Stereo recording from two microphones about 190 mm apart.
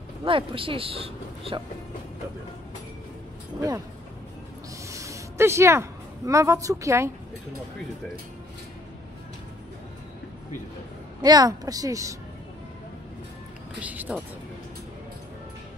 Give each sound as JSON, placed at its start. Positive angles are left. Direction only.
{"t": 0.2, "sound": "speech", "side_deg": -30}
{"t": 4.8, "sound": "a sound", "side_deg": -15}
{"t": 11.1, "sound": "speech", "side_deg": -20}
{"t": 13.7, "sound": "speech", "side_deg": -10}